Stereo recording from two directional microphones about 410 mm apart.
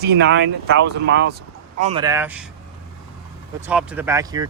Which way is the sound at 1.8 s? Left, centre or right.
Centre.